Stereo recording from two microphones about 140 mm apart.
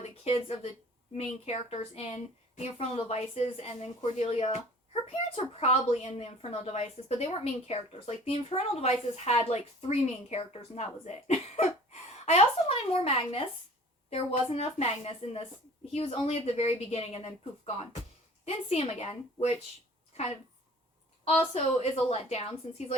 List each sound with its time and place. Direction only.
0.3 s a woman's voice: 45° left (ahead or behind)
21.2 s a woman's voice: 50° left (ahead or behind)